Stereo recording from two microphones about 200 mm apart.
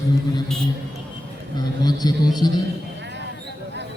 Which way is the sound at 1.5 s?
20° left (ahead or behind).